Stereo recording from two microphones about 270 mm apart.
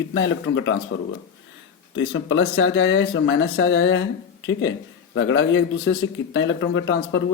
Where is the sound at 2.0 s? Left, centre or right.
Left.